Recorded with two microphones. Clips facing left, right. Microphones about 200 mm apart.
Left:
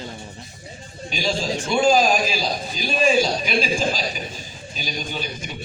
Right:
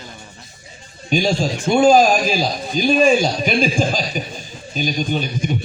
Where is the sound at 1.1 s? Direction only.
50° right (ahead or behind).